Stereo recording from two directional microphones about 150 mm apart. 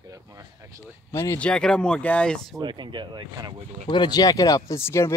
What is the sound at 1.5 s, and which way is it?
Speech, 5° left (ahead or behind).